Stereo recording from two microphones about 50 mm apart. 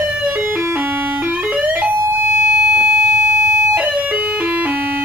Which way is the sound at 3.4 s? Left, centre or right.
Right.